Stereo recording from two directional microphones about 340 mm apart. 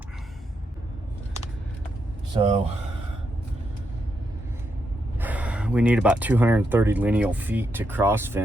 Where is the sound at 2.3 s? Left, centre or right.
Centre.